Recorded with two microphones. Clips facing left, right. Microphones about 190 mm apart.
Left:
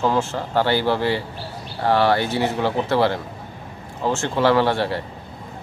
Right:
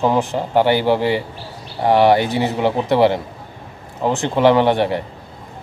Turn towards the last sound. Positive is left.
turn(degrees=-20)  # may be behind; listen again after turning